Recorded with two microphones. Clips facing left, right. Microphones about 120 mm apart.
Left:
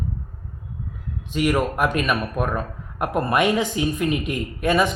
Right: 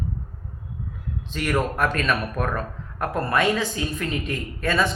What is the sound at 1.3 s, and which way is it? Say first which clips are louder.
Speech: left 4 dB; 10° left (ahead or behind).